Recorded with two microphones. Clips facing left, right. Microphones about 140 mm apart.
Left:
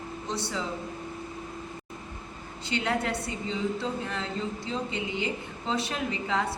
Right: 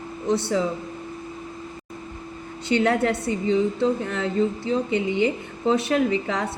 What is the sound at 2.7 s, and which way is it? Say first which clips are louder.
A woman's voice: right 8 dB; 50° right (ahead or behind).